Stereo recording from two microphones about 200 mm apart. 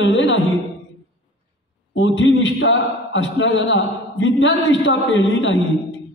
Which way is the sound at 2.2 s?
70° left (ahead or behind).